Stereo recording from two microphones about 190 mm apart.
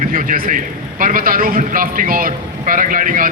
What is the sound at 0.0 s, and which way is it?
A man's voice, 45° right (ahead or behind).